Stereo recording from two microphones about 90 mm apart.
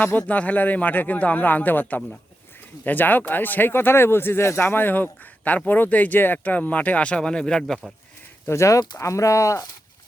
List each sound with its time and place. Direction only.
0.0 s speech: 20° left (ahead or behind)
8.4 s speech: 35° left (ahead or behind)